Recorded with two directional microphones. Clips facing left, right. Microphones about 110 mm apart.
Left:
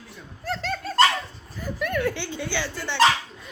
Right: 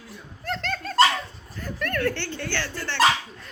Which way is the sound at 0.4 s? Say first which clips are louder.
Left 1 dB; 5° left (ahead or behind).